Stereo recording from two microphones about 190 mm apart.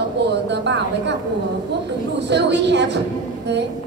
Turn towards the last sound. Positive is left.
turn(degrees=-65)  # may be behind; listen again after turning